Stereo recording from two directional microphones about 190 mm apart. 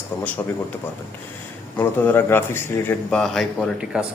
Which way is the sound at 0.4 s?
10° left (ahead or behind).